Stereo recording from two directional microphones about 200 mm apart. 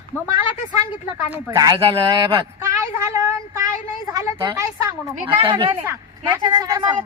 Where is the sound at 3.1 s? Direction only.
15° right (ahead or behind).